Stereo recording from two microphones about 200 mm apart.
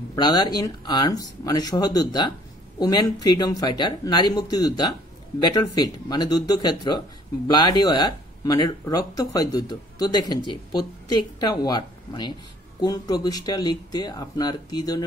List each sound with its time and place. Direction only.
0.1 s speech: 20° left (ahead or behind)